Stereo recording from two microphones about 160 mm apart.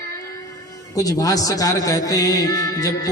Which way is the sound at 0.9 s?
20° left (ahead or behind).